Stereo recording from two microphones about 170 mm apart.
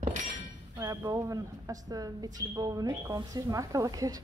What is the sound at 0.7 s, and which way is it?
Speech, 20° right (ahead or behind).